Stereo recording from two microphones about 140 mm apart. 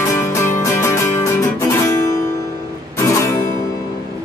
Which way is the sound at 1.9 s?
25° left (ahead or behind).